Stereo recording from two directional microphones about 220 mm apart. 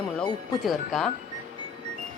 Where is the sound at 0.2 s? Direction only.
Centre (ahead or behind).